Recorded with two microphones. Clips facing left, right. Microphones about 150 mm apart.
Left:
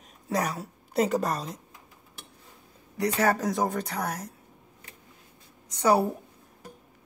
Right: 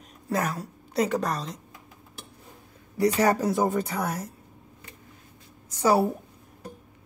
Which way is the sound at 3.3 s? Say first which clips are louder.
Right 3 dB; 5° right (ahead or behind).